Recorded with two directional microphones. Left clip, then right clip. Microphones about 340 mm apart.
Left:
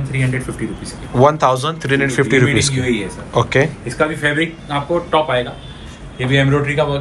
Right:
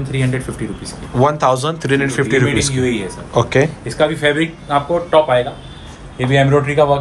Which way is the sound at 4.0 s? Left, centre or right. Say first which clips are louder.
Right 2 dB; right.